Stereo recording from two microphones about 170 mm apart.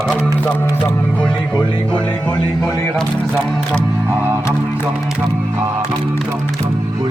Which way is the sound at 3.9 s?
10° right (ahead or behind).